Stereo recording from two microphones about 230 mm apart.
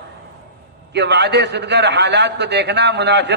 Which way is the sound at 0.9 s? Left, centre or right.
Right.